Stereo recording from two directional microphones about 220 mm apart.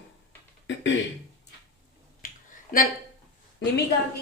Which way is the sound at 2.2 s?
40° left (ahead or behind).